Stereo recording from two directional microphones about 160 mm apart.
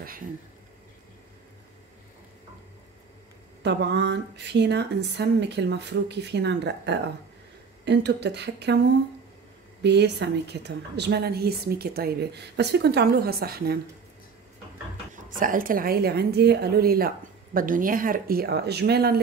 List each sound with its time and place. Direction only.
3.6 s a woman's voice: 90° right
9.8 s a woman's voice: 90° right
15.3 s speech: 60° right (ahead or behind)
17.6 s speech: 60° right (ahead or behind); by 19.2 s 75° right (ahead or behind)